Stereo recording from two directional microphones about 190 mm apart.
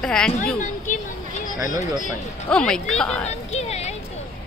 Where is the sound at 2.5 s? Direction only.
5° left (ahead or behind).